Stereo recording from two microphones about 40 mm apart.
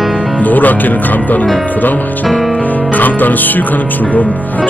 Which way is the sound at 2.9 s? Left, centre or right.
Left.